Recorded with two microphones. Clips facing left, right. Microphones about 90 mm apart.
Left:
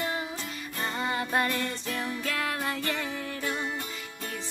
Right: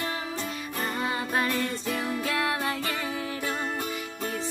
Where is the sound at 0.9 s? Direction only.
5° right (ahead or behind).